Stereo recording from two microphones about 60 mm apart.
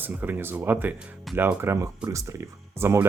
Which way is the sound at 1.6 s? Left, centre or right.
Right.